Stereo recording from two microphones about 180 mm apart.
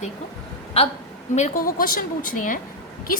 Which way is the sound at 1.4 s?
45° left (ahead or behind).